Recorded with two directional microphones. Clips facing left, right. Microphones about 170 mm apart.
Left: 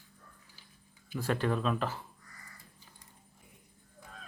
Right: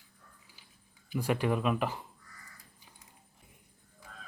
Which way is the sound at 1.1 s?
15° right (ahead or behind).